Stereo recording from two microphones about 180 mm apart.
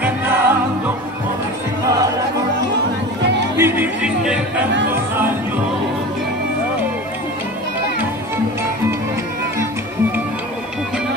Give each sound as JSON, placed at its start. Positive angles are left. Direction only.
{"t": 0.0, "sound": "music", "side_deg": -10}
{"t": 3.5, "sound": "speech", "side_deg": -10}
{"t": 4.9, "sound": "music", "side_deg": -10}